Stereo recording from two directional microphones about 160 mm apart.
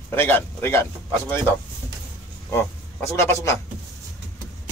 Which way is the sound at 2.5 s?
15° left (ahead or behind).